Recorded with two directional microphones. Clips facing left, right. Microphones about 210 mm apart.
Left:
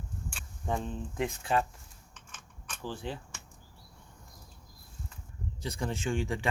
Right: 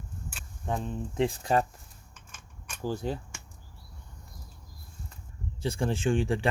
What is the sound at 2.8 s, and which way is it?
Speech, 40° right (ahead or behind).